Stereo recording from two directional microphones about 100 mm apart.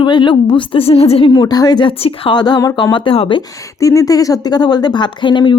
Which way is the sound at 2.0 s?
65° left (ahead or behind).